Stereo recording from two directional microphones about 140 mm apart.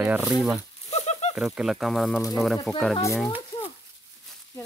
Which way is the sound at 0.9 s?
50° left (ahead or behind).